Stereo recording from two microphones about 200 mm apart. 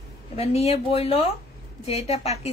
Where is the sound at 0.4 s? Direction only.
30° left (ahead or behind).